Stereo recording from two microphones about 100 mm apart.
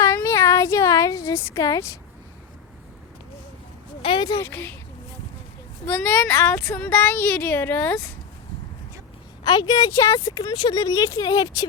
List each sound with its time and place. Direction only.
0.0 s a sound: 30° left (ahead or behind)
4.0 s speech: 60° left (ahead or behind)
4.3 s speech: 25° left (ahead or behind)
5.8 s speech: 15° left (ahead or behind)
9.4 s speech: 45° left (ahead or behind)